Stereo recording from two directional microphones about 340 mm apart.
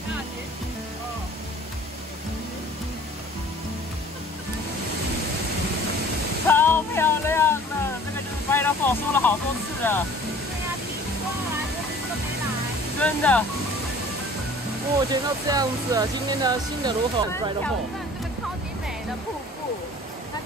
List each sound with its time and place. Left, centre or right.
6.4 s a sound: centre
8.5 s speech: centre
13.0 s speech: centre
15.0 s speech: centre